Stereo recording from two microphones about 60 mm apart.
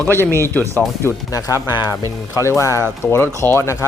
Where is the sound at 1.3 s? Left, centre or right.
Left.